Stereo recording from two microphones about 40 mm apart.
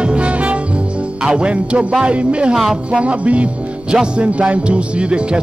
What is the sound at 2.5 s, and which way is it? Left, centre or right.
Speech, centre.